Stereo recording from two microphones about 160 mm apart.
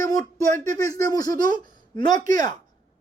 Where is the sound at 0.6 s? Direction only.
20° left (ahead or behind).